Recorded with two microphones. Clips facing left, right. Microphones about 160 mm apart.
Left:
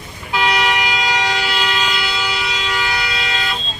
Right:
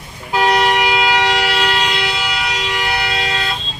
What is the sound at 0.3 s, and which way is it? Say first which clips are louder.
Train: right 4 dB; 45° right (ahead or behind).